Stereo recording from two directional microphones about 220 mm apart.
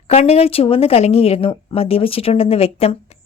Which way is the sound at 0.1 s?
25° left (ahead or behind).